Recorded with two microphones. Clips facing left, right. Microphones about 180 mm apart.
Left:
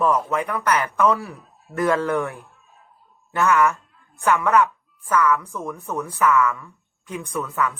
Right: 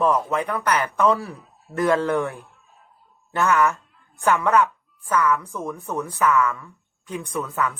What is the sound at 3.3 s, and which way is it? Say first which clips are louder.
Speech: left 1 dB; 35° right (ahead or behind).